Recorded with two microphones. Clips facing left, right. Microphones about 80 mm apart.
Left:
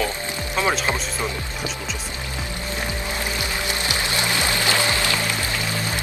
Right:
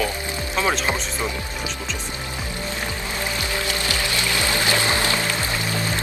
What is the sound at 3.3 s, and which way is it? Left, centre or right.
Music, left.